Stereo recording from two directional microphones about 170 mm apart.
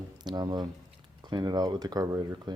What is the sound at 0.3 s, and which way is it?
Speech, 25° right (ahead or behind).